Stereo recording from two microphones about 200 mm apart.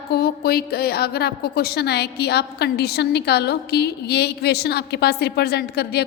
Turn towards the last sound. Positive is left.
turn(degrees=55)  # may be behind; listen again after turning